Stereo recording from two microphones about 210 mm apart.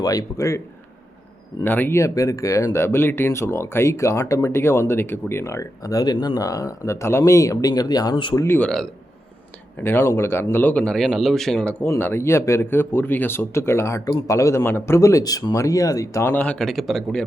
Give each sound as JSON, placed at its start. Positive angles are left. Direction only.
{"t": 0.0, "sound": "speech", "side_deg": 15}
{"t": 1.6, "sound": "speech", "side_deg": 10}
{"t": 8.4, "sound": "a man's voice", "side_deg": 5}